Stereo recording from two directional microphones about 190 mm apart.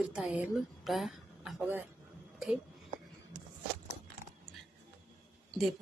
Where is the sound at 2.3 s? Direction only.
Centre (ahead or behind).